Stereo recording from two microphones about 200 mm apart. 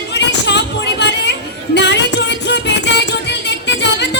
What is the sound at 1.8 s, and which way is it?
Music, 60° left (ahead or behind).